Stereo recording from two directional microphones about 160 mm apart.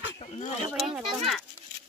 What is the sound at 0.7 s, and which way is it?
Speech, centre (ahead or behind).